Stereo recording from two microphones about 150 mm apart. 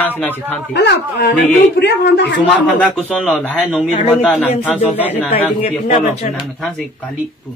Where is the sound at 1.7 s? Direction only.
90° left.